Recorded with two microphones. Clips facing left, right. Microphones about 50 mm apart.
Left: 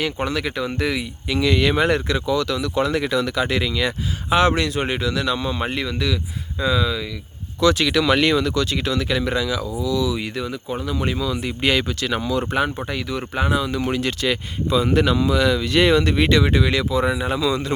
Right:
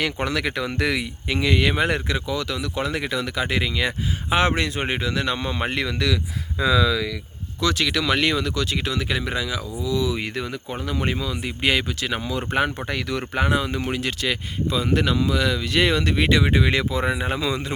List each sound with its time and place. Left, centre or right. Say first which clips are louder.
0.0 s speech: left 1 dB; right
1.4 s speech: left 3 dB; centre; by 6.1 s right
6.6 s speech: right 1 dB; right
7.6 s speech: left 5 dB; centre
9.8 s speech: left 1 dB; right
10.2 s speech: left 1 dB; right
11.2 s speech: left 3 dB; centre
12.5 s speech: right 3 dB; right
12.9 s speech: even; right
13.9 s speech: left 3 dB; centre
16.4 s speech: left 1 dB; right
17.5 s speech: left 4 dB; centre